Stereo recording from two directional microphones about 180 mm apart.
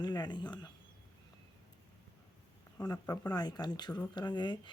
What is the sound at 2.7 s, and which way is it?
Speech, 20° left (ahead or behind).